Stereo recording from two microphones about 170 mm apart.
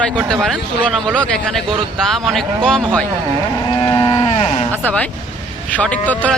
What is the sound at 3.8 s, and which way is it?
Livestock, 25° left (ahead or behind).